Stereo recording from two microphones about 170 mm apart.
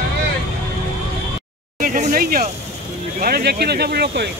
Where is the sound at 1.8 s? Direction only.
50° right (ahead or behind).